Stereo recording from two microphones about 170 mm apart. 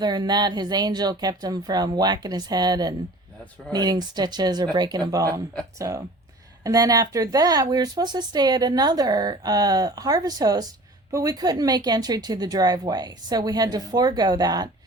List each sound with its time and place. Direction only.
0.0 s speech: 25° right (ahead or behind)
6.7 s speech: 20° right (ahead or behind)